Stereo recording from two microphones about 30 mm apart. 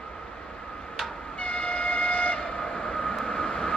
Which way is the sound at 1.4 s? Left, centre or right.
Left.